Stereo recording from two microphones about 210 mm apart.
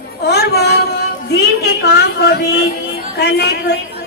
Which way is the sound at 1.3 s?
50° left (ahead or behind).